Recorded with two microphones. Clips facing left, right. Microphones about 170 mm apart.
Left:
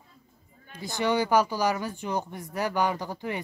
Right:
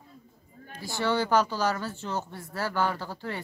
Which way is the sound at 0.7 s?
20° left (ahead or behind).